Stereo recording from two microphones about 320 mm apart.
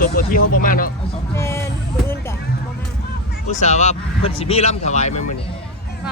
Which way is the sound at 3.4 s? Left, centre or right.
Left.